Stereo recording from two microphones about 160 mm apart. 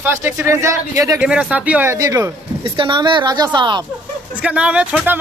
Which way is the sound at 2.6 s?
30° right (ahead or behind).